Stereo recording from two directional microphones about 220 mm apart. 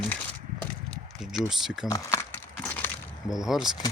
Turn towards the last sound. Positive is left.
turn(degrees=0)  # may be behind; listen again after turning